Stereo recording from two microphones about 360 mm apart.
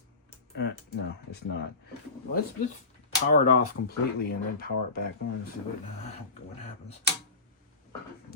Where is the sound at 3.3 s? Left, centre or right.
Left.